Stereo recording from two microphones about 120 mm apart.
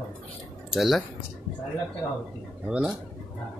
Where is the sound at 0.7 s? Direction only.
Centre (ahead or behind).